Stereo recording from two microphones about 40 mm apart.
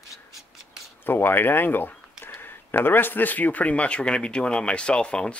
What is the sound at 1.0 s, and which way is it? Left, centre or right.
Speech, left.